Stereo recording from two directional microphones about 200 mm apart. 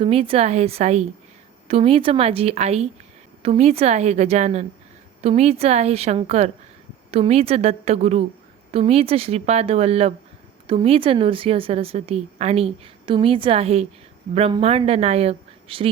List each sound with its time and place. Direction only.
0.0 s a woman's voice: 30° right (ahead or behind)